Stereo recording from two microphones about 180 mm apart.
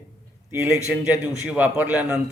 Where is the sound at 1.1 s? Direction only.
5° right (ahead or behind).